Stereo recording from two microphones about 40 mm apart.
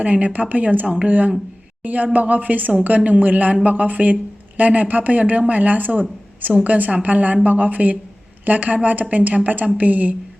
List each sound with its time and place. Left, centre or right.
0.0 s speech: right
0.9 s speech: right
1.8 s a woman's voice: right